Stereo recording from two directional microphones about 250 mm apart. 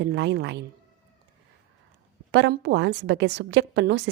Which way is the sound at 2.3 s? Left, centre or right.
Right.